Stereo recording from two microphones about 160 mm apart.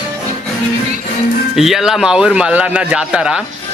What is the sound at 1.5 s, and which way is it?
A man's voice, centre (ahead or behind).